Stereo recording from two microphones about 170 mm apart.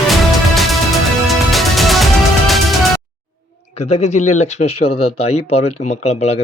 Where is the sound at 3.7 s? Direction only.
40° left (ahead or behind).